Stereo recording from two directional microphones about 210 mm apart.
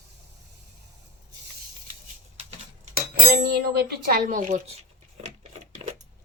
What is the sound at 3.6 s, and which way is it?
Speech, 50° right (ahead or behind).